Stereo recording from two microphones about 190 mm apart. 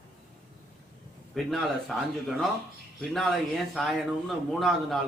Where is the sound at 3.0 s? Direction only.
Centre (ahead or behind).